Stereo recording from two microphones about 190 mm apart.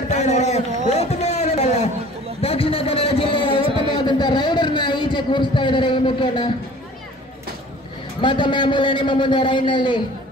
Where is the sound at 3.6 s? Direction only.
25° right (ahead or behind).